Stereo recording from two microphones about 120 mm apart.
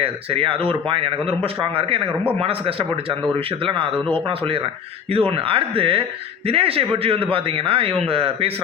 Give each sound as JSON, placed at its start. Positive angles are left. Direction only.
{"t": 0.0, "sound": "a man's voice", "side_deg": -50}
{"t": 2.4, "sound": "a man's voice", "side_deg": -50}